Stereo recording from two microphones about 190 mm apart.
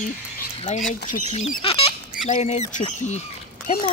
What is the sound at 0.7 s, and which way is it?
Speech, 45° left (ahead or behind).